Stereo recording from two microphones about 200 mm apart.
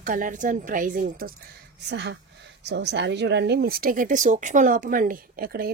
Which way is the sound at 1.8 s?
60° right (ahead or behind).